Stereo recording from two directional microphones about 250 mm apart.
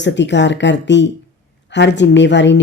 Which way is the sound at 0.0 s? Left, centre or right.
Left.